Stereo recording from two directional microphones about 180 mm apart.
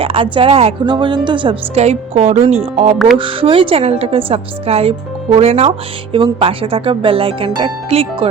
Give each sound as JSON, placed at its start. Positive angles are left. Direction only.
{"t": 0.0, "sound": "speech", "side_deg": -30}